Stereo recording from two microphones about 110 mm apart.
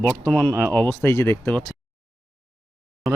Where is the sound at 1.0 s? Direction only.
20° left (ahead or behind).